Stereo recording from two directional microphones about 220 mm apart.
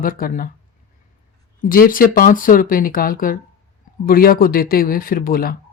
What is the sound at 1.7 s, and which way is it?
Speech, 40° left (ahead or behind).